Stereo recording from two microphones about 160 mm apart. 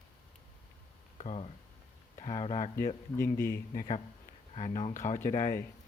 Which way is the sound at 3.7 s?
55° left (ahead or behind).